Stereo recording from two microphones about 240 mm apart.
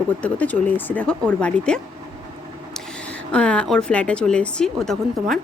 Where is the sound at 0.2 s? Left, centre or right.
Centre.